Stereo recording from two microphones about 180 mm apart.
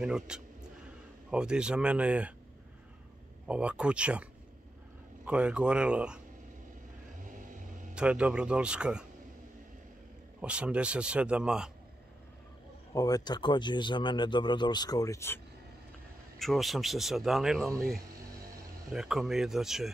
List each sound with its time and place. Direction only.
0.0 s speech: 5° right (ahead or behind)
3.4 s speech: 5° right (ahead or behind)
7.9 s speech: 5° right (ahead or behind)
10.4 s speech: 5° right (ahead or behind)
12.9 s speech: 20° left (ahead or behind)
16.3 s speech: centre (ahead or behind)
18.9 s speech: centre (ahead or behind)